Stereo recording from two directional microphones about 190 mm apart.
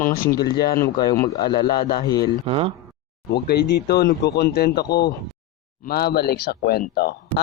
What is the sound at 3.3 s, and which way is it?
Speech, 60° left (ahead or behind).